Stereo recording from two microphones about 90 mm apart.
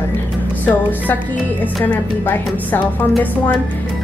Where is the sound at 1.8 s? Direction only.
20° left (ahead or behind).